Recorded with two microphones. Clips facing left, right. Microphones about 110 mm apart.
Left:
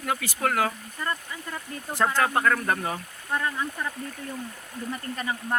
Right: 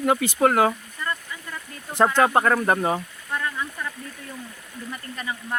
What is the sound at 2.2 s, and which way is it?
Speech, 25° right (ahead or behind).